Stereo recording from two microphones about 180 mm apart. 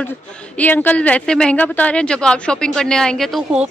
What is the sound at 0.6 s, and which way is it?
A woman's voice, 10° left (ahead or behind).